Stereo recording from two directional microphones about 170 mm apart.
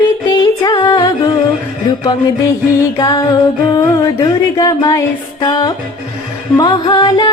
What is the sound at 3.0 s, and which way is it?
Music, 20° left (ahead or behind).